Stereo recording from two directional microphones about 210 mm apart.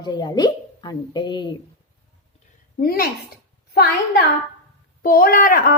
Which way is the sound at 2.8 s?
45° left (ahead or behind).